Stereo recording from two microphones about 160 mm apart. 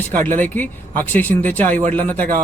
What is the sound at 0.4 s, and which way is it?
Speech, 10° left (ahead or behind).